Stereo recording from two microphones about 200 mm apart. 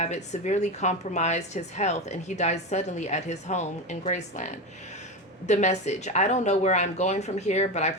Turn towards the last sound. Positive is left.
turn(degrees=35)  # may be behind; listen again after turning